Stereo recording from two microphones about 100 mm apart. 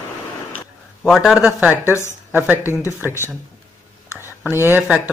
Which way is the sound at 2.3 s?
20° right (ahead or behind).